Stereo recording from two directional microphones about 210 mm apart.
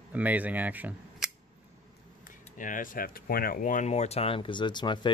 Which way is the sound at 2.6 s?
40° left (ahead or behind).